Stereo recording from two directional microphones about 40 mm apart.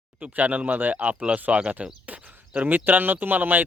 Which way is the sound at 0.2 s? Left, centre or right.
Right.